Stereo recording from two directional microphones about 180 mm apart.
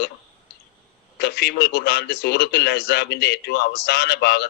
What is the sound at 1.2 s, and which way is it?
A man's voice, 65° left (ahead or behind).